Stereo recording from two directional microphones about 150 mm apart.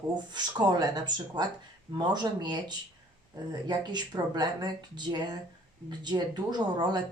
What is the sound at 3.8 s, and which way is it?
Speech, 30° right (ahead or behind).